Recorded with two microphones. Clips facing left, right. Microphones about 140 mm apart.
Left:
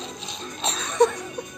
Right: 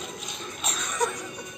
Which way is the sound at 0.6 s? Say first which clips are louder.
Left 9 dB; 30° left (ahead or behind).